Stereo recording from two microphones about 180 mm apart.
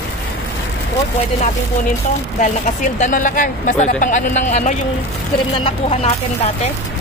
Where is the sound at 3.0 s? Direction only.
45° left (ahead or behind).